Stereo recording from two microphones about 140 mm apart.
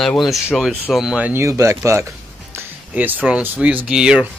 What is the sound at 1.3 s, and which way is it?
Speech, 20° right (ahead or behind).